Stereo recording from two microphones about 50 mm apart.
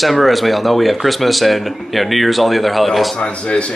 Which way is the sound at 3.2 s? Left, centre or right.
Centre.